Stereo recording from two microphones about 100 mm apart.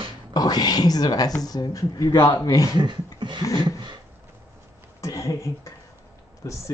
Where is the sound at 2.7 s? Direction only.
50° right (ahead or behind).